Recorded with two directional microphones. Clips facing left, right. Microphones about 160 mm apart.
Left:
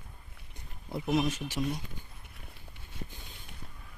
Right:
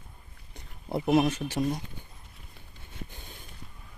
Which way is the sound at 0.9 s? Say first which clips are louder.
Right 6 dB; 65° right (ahead or behind).